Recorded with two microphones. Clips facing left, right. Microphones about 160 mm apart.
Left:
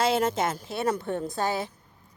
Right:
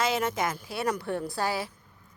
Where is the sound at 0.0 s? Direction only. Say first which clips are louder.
Left 3 dB; 30° left (ahead or behind).